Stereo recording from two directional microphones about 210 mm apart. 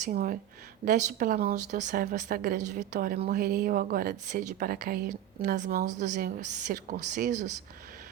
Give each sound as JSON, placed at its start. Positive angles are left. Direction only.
{"t": 0.0, "sound": "a woman's voice", "side_deg": -40}